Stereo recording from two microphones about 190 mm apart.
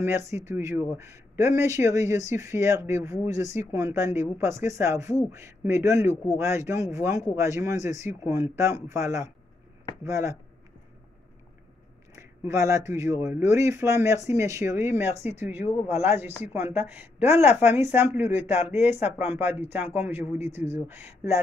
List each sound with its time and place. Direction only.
0.0 s speech: 10° right (ahead or behind)
12.2 s speech: 15° right (ahead or behind)